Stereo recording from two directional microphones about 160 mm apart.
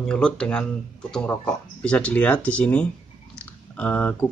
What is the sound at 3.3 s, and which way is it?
Typing, 10° left (ahead or behind).